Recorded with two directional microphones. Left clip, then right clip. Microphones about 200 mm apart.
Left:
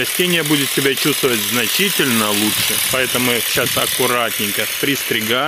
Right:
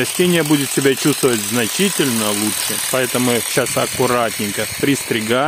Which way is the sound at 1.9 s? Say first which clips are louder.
Left 2 dB; 20° right (ahead or behind).